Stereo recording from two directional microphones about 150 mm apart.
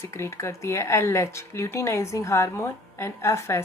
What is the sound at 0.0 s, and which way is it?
A woman's voice, 20° left (ahead or behind).